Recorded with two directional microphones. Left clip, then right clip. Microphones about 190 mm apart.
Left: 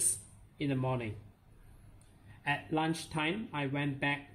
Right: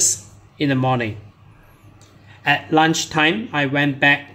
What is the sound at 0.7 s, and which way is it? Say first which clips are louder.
Speech: right 16 dB; 20° right (ahead or behind).